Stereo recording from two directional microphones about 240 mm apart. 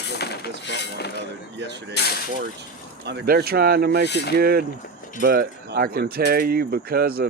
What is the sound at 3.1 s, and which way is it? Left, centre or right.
Speech, right.